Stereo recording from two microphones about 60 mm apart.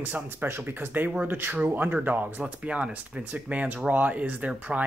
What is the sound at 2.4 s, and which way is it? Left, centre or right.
Speech, right.